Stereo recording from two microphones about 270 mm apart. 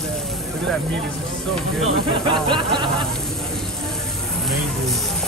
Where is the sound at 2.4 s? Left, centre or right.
Centre.